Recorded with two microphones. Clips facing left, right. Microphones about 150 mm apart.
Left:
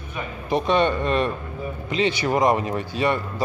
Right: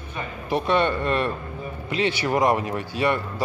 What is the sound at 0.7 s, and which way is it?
Speech, 15° left (ahead or behind).